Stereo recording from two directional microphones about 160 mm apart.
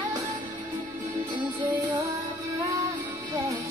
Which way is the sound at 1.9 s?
15° right (ahead or behind).